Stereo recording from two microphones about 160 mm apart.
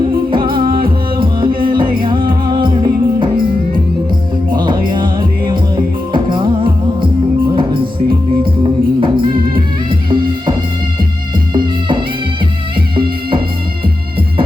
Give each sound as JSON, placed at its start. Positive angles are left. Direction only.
{"t": 1.2, "sound": "music", "side_deg": -30}
{"t": 4.5, "sound": "music", "side_deg": -30}
{"t": 9.0, "sound": "music", "side_deg": -30}
{"t": 11.5, "sound": "music", "side_deg": -30}